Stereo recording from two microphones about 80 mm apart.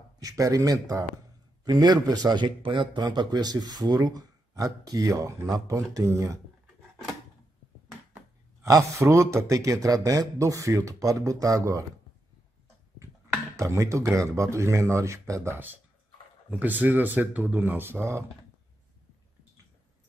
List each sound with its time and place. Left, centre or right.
0.4 s a man's voice: right
1.6 s a man's voice: right
8.6 s a man's voice: right
13.6 s speech: right
15.5 s speech: right